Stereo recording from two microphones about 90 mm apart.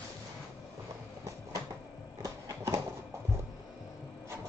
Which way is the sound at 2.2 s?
35° right (ahead or behind).